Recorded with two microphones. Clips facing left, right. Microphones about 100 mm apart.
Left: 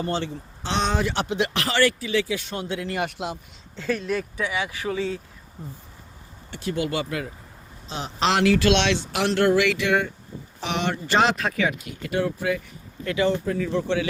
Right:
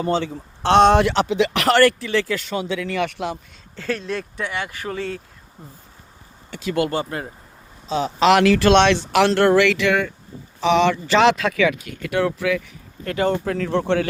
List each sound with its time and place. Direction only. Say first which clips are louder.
0.6 s speech: right 11 dB; 65° right (ahead or behind)
3.8 s speech: even; 5° left (ahead or behind)
4.9 s speech: left 2 dB; 60° right (ahead or behind)
6.6 s speech: right 5 dB; 90° right
6.9 s speech: right 2 dB; 35° right (ahead or behind)
8.3 s speech: right 5 dB; 70° right (ahead or behind)
8.6 s speech: right 6 dB; 50° right (ahead or behind); by 12.6 s 75° right (ahead or behind)
13.1 s speech: right 2 dB; 45° right (ahead or behind)
13.4 s speech: right 3 dB; 75° right (ahead or behind)